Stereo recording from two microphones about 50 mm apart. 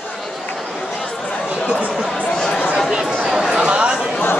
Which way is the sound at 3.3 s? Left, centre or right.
Centre.